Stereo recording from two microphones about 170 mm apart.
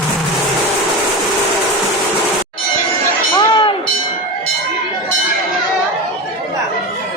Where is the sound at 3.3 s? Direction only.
25° left (ahead or behind).